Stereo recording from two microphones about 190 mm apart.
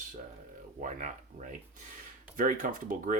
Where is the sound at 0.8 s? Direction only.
40° right (ahead or behind).